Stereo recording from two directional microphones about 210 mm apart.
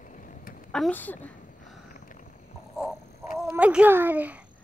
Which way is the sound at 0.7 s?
5° left (ahead or behind).